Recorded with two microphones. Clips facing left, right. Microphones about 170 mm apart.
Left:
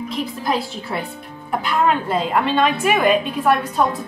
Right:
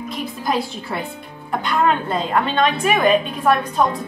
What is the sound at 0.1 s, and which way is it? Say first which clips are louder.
A woman's voice: even; centre (ahead or behind).